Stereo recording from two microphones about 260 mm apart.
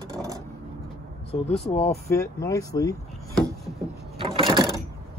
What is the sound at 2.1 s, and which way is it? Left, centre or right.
Speech, centre.